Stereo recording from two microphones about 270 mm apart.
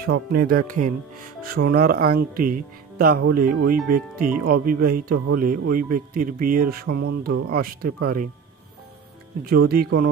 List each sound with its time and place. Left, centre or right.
0.0 s speech: right
9.5 s speech: right